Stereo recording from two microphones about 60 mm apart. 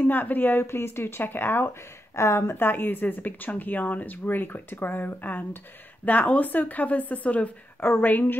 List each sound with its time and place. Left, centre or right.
0.0 s a woman's voice: left